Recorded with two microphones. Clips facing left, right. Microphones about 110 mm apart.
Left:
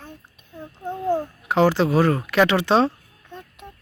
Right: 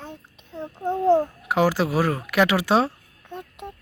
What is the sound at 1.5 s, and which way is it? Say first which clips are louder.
Speech: left 4 dB; 10° right (ahead or behind).